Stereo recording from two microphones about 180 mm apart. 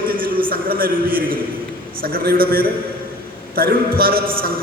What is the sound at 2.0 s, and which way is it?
A man's voice, 55° right (ahead or behind).